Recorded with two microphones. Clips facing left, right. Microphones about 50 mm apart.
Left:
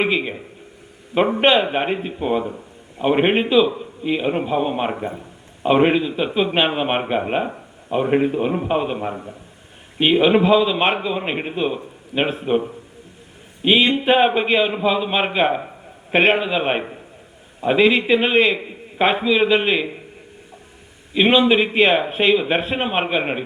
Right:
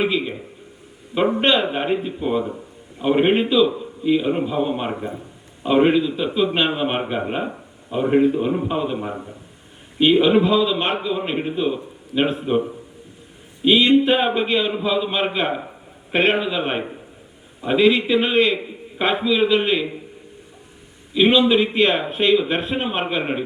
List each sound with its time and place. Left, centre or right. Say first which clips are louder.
0.0 s a sound: left 1 dB; left
1.1 s a man's voice: left 2 dB; left
13.7 s a man's voice: right 1 dB; left
21.1 s a man's voice: even; left